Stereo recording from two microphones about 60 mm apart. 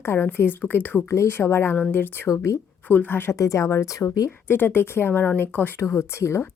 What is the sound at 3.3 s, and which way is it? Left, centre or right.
Speech, left.